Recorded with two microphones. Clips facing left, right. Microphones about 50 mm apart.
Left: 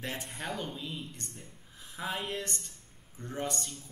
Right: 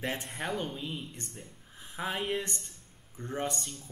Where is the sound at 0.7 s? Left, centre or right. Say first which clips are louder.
Right 2 dB; right.